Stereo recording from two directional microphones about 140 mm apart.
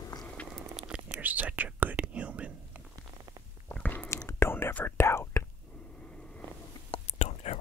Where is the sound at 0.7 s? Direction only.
5° right (ahead or behind).